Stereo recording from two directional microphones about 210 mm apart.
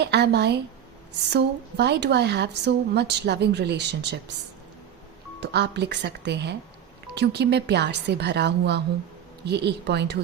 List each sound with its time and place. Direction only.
0.0 s a woman's voice: 50° right (ahead or behind)
5.4 s a woman's voice: 55° right (ahead or behind)